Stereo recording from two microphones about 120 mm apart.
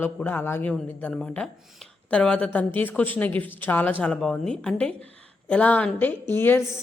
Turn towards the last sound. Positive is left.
turn(degrees=20)  # may be behind; listen again after turning